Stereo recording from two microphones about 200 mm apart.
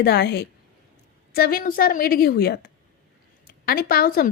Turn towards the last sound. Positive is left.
turn(degrees=50)  # may be behind; listen again after turning